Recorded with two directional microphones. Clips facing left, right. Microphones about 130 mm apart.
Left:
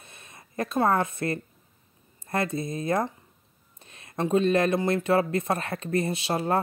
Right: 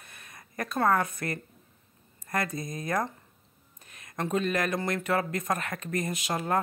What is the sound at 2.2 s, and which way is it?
Speech, 25° left (ahead or behind).